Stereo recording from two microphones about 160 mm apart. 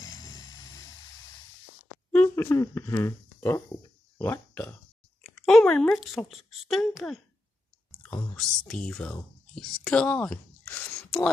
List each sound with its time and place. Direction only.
0.1 s a sound: 25° left (ahead or behind)
2.1 s speech: 15° left (ahead or behind)
5.2 s a woman's voice: centre (ahead or behind)